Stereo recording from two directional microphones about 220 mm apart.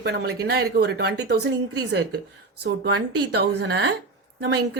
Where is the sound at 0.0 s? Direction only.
45° right (ahead or behind).